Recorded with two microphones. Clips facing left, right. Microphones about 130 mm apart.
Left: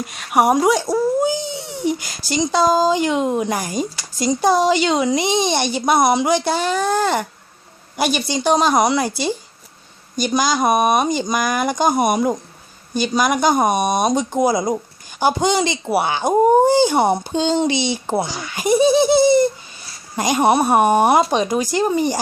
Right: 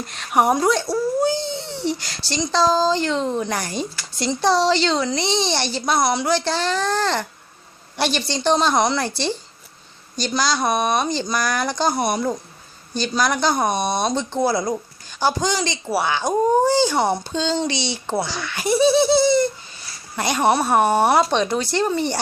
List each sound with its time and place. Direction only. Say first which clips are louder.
0.0 s a woman's voice: left 2 dB; 10° left (ahead or behind)
1.2 s baby cry: left 1 dB; 15° left (ahead or behind)
2.3 s a woman's voice: left 3 dB; 10° left (ahead or behind)